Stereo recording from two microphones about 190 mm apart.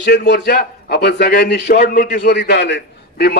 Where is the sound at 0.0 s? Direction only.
65° left (ahead or behind).